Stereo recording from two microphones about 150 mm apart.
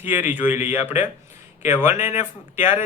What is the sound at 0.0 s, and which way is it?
Speech, 15° right (ahead or behind).